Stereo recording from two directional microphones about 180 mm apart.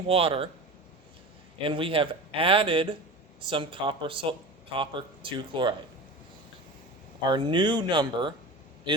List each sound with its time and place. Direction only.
0.1 s speech: 30° right (ahead or behind)
1.6 s speech: 30° right (ahead or behind)
7.2 s speech: 25° right (ahead or behind)